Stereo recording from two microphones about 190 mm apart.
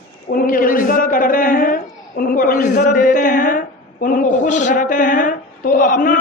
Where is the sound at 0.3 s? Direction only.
50° left (ahead or behind).